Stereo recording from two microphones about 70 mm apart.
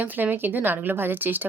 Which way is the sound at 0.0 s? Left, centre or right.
Right.